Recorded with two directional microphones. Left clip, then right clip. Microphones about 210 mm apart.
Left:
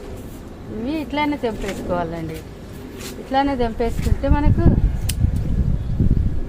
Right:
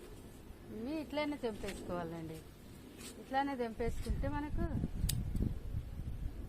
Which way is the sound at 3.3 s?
30° right (ahead or behind).